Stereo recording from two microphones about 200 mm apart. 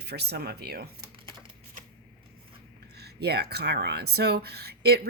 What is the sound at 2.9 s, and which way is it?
Speech, 55° right (ahead or behind).